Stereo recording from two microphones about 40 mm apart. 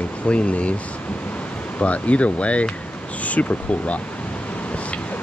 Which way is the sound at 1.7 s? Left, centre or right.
Left.